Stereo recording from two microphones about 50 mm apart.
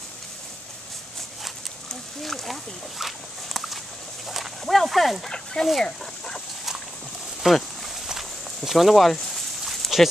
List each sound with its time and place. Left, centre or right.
2.2 s dog: centre
5.3 s speech: centre
5.9 s dog: centre
7.4 s a sound: centre